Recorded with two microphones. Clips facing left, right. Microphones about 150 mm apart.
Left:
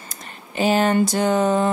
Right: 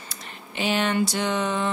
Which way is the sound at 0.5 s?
40° left (ahead or behind).